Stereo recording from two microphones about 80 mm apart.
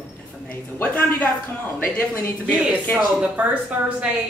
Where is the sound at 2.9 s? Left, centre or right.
Centre.